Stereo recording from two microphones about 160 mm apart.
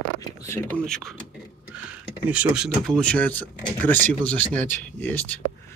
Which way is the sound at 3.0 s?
10° left (ahead or behind).